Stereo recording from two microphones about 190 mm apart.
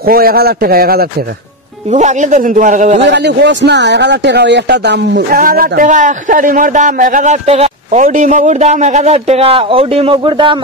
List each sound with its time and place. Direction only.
0.0 s speech: 50° right (ahead or behind)
1.9 s a man's voice: 40° right (ahead or behind)
3.0 s speech: 65° right (ahead or behind); by 10.6 s 25° right (ahead or behind)